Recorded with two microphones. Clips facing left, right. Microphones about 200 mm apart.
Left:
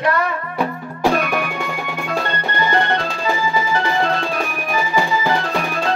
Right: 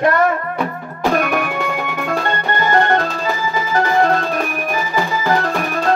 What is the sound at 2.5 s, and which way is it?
Music, 50° right (ahead or behind).